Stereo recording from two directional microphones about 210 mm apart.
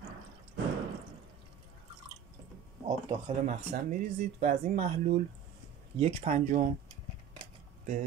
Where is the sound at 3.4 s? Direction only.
35° right (ahead or behind).